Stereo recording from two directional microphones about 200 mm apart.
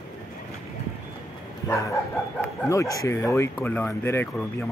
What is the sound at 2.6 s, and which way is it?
Speech, 15° left (ahead or behind).